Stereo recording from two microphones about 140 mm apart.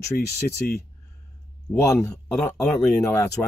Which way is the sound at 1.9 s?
20° left (ahead or behind).